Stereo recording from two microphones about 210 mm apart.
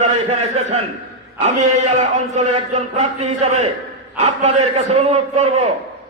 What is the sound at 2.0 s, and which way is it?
A man's voice, 35° right (ahead or behind).